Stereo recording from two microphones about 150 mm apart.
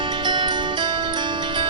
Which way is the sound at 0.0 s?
30° right (ahead or behind).